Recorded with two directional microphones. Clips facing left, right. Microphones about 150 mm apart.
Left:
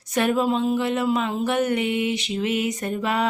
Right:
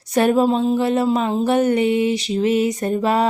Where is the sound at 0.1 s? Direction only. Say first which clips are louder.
Right 5 dB; 35° right (ahead or behind).